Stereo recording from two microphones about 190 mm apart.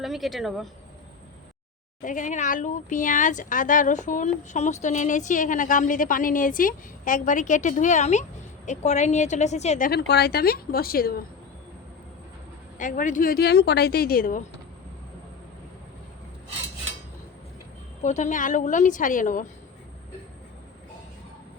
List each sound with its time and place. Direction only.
0.0 s speech: centre (ahead or behind)
2.0 s a woman's voice: 45° left (ahead or behind)
12.8 s a woman's voice: 45° left (ahead or behind)
18.0 s a woman's voice: 40° left (ahead or behind)